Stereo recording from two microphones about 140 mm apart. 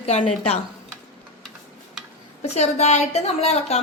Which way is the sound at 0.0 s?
45° left (ahead or behind).